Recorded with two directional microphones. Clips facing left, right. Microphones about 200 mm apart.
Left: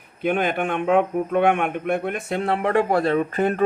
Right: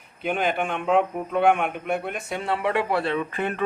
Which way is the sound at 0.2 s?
55° left (ahead or behind).